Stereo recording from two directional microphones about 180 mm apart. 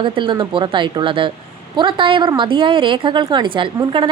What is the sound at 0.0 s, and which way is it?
A woman's voice, 25° right (ahead or behind).